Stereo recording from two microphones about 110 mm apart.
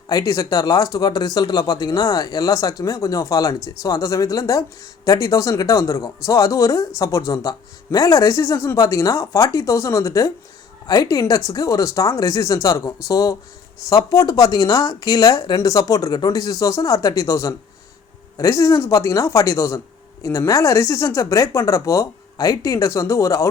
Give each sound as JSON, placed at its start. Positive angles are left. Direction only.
{"t": 0.1, "sound": "speech", "side_deg": 35}